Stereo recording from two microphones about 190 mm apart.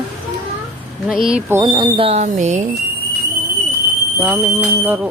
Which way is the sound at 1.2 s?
5° right (ahead or behind).